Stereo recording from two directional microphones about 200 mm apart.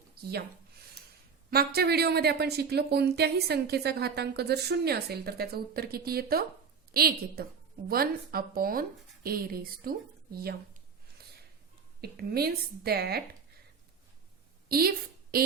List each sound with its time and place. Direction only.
0.2 s speech: 50° right (ahead or behind)
1.5 s speech: 50° right (ahead or behind)
11.9 s speech: 50° right (ahead or behind)
14.7 s a woman's voice: 50° right (ahead or behind)